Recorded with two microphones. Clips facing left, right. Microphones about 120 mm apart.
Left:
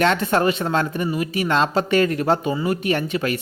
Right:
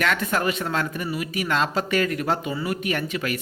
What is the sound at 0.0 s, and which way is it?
Speech, 30° left (ahead or behind).